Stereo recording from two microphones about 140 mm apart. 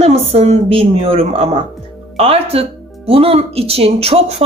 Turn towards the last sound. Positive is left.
turn(degrees=-45)  # may be behind; listen again after turning